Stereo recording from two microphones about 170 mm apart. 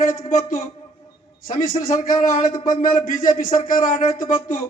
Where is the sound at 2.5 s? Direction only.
25° left (ahead or behind).